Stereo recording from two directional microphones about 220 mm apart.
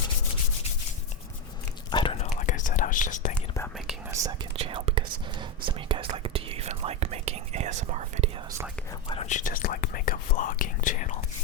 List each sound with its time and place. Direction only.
1.9 s whispering: 25° left (ahead or behind)
3.3 s whispering: 10° left (ahead or behind)
4.1 s speech: 15° right (ahead or behind)
4.5 s whispering: 25° right (ahead or behind)
9.0 s whispering: 30° left (ahead or behind)